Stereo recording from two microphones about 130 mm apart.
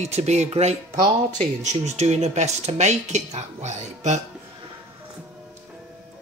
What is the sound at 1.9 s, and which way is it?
Speech, 55° right (ahead or behind).